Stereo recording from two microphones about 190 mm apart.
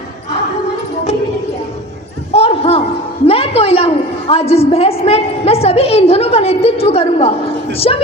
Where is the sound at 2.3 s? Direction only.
30° left (ahead or behind).